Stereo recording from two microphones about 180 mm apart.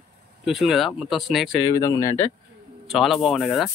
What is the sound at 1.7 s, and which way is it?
Speech, 20° left (ahead or behind).